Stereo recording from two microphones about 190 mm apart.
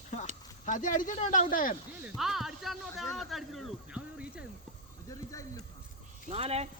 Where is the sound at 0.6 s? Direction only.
40° left (ahead or behind).